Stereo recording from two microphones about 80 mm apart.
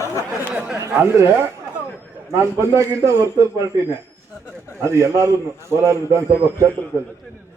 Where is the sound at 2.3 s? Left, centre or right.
Right.